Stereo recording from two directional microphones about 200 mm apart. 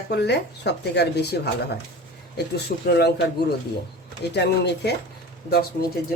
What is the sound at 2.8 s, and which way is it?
Speech, 55° left (ahead or behind).